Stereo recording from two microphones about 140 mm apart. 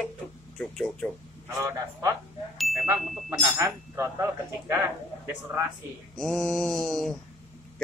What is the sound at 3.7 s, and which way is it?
Speech, 20° right (ahead or behind).